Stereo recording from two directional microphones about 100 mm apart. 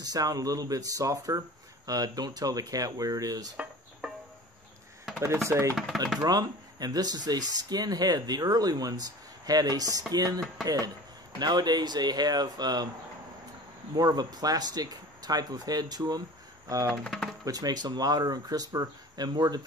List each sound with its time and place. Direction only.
0.0 s speech: 40° right (ahead or behind)
6.2 s speech: 40° right (ahead or behind)
13.9 s speech: 40° right (ahead or behind)
17.0 s speech: 5° left (ahead or behind)
17.5 s speech: 40° right (ahead or behind)